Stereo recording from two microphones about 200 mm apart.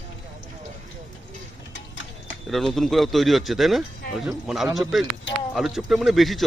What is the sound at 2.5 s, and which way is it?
Speech, centre (ahead or behind).